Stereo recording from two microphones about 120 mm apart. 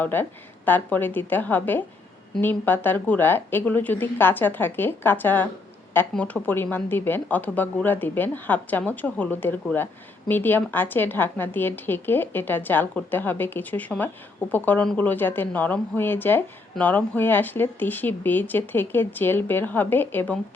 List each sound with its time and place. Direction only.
0.0 s speech: 15° left (ahead or behind)